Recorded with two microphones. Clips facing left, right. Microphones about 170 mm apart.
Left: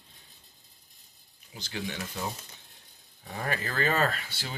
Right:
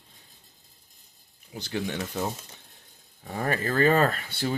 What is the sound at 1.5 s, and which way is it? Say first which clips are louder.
Speech: right 6 dB; 50° right (ahead or behind).